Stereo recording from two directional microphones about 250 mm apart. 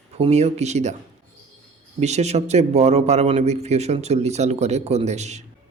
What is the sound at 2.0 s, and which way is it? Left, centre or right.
A man's voice, right.